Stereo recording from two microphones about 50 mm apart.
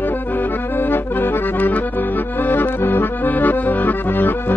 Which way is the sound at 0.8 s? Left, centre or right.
Left.